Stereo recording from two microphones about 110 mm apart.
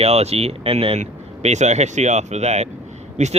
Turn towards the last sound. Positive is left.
turn(degrees=-90)